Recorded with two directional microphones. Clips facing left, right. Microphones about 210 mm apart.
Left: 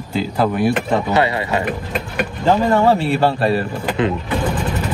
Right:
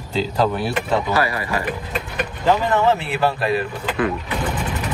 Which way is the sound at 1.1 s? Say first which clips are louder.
Left 4 dB; 25° left (ahead or behind).